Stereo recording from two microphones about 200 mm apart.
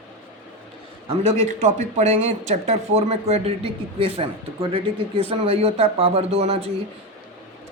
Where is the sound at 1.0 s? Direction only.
30° right (ahead or behind).